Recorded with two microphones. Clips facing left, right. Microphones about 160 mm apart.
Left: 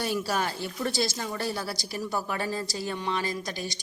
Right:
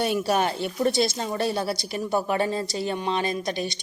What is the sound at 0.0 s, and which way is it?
A woman's voice, 20° right (ahead or behind).